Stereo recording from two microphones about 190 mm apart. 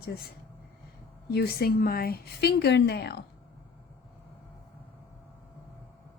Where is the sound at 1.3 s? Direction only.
55° left (ahead or behind).